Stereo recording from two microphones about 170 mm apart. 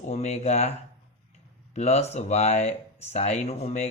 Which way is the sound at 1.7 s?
40° left (ahead or behind).